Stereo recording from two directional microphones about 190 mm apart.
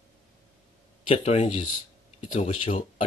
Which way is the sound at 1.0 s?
35° left (ahead or behind).